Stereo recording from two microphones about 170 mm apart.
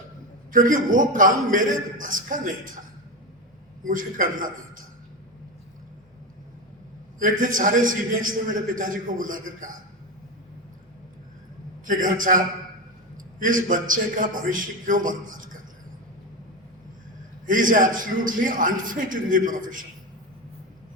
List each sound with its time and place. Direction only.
0.5 s a man's voice: 55° right (ahead or behind)
3.8 s a man's voice: 55° right (ahead or behind)
7.2 s a man's voice: 50° right (ahead or behind)
11.9 s a man's voice: 50° right (ahead or behind)
13.4 s a man's voice: 50° right (ahead or behind)
17.4 s a man's voice: 50° right (ahead or behind)